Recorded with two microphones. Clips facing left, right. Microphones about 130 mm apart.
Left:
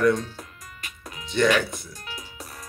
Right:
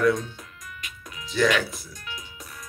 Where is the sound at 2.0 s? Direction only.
35° left (ahead or behind).